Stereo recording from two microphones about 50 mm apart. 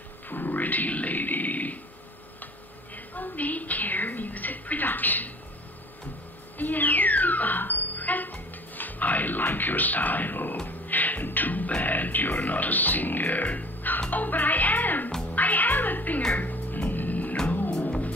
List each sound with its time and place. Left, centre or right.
0.3 s a sound: left
3.2 s a sound: left
6.6 s music: left
10.9 s beatboxing: left
14.1 s music: left
15.3 s cat: left
16.3 s music: left